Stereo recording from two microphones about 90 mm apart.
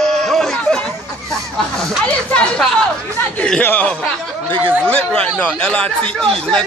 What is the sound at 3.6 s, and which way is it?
Speech, 20° left (ahead or behind).